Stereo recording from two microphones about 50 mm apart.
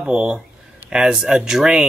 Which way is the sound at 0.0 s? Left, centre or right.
Centre.